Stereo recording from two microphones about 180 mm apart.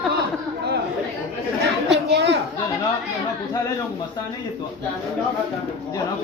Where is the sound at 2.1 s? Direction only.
75° right (ahead or behind).